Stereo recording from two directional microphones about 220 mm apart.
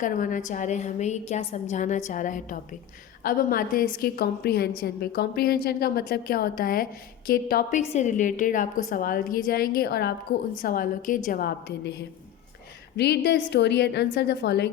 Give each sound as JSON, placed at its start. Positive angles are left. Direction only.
{"t": 0.0, "sound": "a woman's voice", "side_deg": 35}